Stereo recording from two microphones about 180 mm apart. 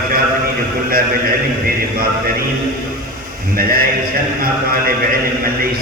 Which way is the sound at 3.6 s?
55° right (ahead or behind).